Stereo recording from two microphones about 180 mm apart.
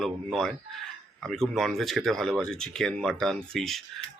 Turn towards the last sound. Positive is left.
turn(degrees=0)  # may be behind; listen again after turning